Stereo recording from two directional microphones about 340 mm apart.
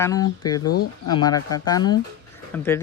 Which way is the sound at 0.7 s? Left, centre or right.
Left.